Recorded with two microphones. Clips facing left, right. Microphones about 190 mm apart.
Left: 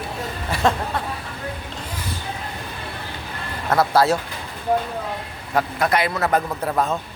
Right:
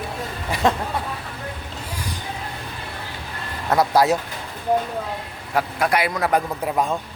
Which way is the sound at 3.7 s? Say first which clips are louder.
Even; 15° right (ahead or behind).